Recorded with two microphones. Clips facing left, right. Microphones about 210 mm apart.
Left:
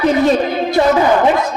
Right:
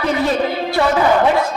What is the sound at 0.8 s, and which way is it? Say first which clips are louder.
Speech: left 4 dB; 20° left (ahead or behind).